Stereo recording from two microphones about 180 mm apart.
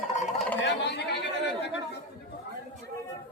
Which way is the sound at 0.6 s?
75° left (ahead or behind).